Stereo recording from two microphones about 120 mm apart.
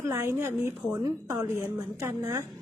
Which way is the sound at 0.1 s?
20° right (ahead or behind).